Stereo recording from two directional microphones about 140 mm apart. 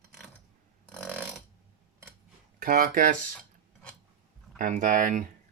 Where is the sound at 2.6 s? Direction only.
80° right.